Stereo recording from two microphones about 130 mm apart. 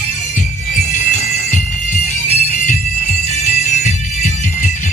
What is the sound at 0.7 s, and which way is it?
Music, 75° left (ahead or behind).